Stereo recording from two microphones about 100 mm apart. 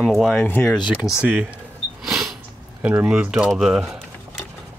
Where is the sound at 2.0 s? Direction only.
5° right (ahead or behind).